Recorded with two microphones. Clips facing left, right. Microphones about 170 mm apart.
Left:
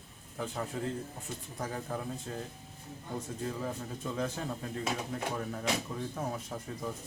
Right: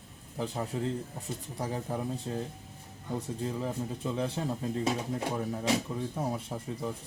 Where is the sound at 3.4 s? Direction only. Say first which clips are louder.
Right 3 dB; 20° right (ahead or behind).